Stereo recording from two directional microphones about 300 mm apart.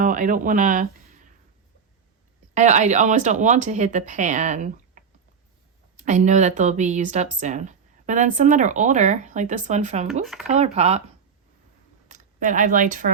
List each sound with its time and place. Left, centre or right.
0.0 s speech: right
2.6 s speech: right
12.0 s speech: right